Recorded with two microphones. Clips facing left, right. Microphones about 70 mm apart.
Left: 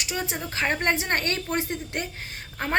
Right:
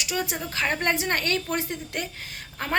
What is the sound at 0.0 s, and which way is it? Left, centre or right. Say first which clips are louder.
A woman's voice: right 1 dB; left.